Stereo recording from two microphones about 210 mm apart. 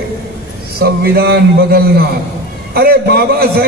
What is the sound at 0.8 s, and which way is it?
A man's voice, 50° right (ahead or behind).